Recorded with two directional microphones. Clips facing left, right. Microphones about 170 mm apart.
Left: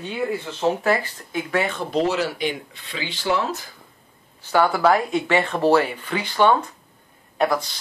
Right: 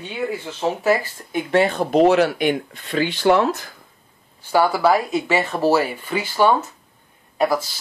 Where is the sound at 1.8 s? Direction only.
55° right (ahead or behind).